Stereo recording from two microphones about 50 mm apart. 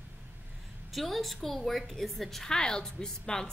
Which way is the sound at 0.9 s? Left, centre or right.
Centre.